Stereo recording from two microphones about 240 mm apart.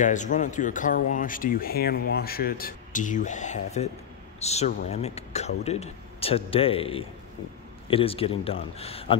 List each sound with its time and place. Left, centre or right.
0.0 s speech: left